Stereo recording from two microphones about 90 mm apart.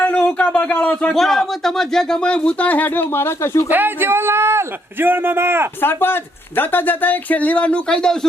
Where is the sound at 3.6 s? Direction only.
20° right (ahead or behind).